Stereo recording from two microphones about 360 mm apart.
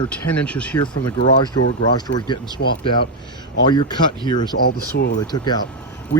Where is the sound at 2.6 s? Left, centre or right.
Left.